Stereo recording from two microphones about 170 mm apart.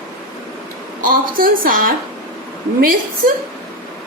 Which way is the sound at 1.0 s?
55° right (ahead or behind).